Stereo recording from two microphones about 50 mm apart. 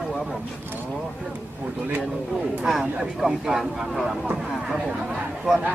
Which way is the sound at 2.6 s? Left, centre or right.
Centre.